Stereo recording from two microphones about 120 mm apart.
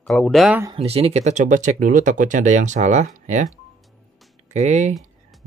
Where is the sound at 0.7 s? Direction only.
55° right (ahead or behind); by 3.4 s 90° right.